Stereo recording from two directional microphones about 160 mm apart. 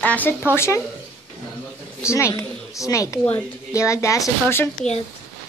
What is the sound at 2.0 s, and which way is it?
A woman's voice, 15° left (ahead or behind).